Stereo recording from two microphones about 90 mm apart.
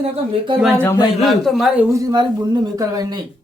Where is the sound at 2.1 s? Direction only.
55° right (ahead or behind).